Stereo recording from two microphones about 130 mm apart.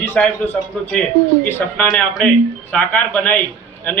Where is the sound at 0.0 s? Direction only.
15° left (ahead or behind).